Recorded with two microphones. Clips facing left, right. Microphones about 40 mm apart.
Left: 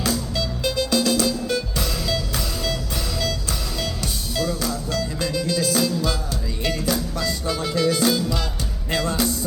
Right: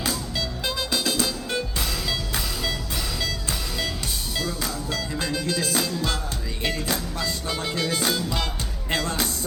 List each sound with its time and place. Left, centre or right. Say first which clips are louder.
0.6 s music: left 6 dB; right
2.0 s music: left 2 dB; centre
4.6 s music: left 4 dB; right